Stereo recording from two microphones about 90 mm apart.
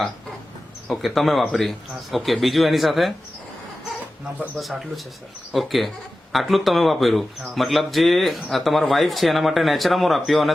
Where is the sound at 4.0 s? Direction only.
15° right (ahead or behind).